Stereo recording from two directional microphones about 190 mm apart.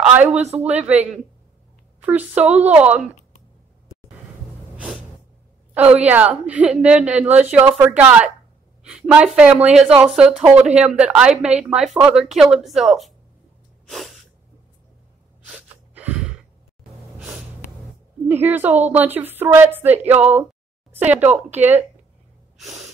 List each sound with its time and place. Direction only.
0.0 s speech: 5° right (ahead or behind)
0.4 s speech: 35° right (ahead or behind)
0.7 s a woman's voice: 10° right (ahead or behind)
4.7 s music: 5° right (ahead or behind)
5.8 s a woman's voice: 5° right (ahead or behind)
13.8 s sneeze: centre (ahead or behind)
15.4 s gasp: 5° right (ahead or behind)
18.3 s a woman's voice: 10° right (ahead or behind)
22.6 s gasp: centre (ahead or behind)